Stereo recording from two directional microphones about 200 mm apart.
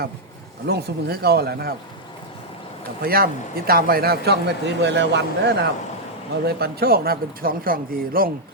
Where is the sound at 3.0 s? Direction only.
50° right (ahead or behind).